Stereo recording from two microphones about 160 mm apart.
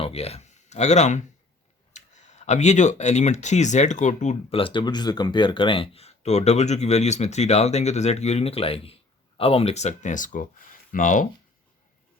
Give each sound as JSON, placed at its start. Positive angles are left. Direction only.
{"t": 0.0, "sound": "speech", "side_deg": 40}